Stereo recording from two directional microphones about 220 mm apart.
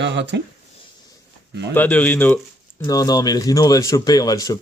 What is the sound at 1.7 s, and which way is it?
Speech, 5° left (ahead or behind).